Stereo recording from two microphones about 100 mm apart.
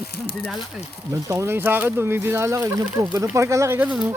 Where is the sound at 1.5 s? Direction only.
20° right (ahead or behind).